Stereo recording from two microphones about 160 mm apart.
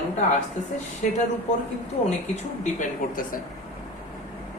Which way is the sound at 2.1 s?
50° left (ahead or behind).